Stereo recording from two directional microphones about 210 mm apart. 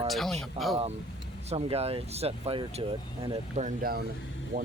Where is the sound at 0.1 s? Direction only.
Centre (ahead or behind).